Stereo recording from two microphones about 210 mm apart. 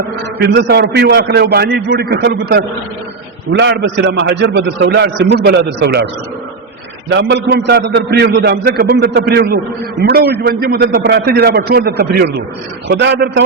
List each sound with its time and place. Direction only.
0.3 s a man's voice: 50° right (ahead or behind)
7.1 s a man's voice: 55° right (ahead or behind)